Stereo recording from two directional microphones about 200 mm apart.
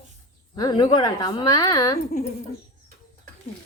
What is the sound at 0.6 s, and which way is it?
A woman's voice, 20° left (ahead or behind).